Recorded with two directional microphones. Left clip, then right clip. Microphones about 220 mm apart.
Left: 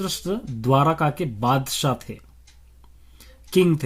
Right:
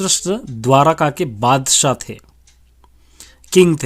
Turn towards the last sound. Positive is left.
turn(degrees=-45)  # may be behind; listen again after turning